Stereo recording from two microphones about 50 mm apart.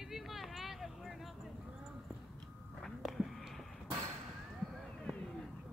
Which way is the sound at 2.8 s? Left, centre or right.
Centre.